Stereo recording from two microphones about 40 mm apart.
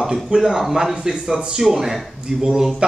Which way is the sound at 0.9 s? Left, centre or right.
Right.